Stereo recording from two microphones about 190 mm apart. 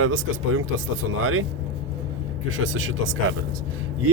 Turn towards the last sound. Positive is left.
turn(degrees=-90)